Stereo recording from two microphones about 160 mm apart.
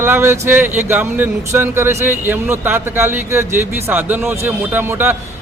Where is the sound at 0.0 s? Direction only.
15° right (ahead or behind).